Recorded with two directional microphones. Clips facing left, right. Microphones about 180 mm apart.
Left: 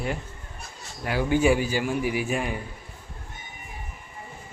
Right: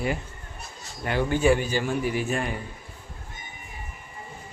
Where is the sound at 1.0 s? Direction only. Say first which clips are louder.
Even; 10° left (ahead or behind).